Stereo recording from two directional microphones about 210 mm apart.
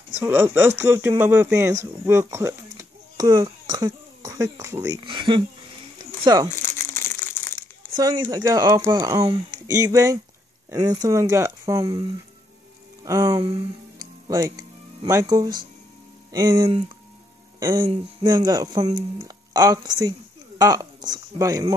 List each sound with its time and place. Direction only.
0.2 s speech: 10° right (ahead or behind)
6.5 s crumpling: 10° left (ahead or behind)
7.9 s speech: 20° right (ahead or behind)